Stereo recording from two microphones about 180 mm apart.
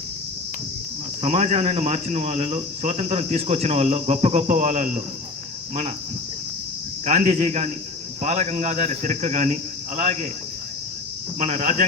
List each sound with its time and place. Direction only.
1.2 s speech: 35° right (ahead or behind)
7.0 s speech: 40° right (ahead or behind)
11.3 s speech: 40° right (ahead or behind)